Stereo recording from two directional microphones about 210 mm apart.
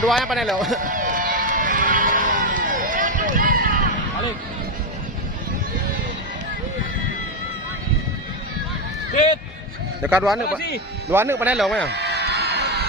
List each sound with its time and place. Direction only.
0.0 s speech: centre (ahead or behind)
0.9 s run: 40° right (ahead or behind)
10.0 s speech: 5° right (ahead or behind)
11.9 s crowd: 55° right (ahead or behind)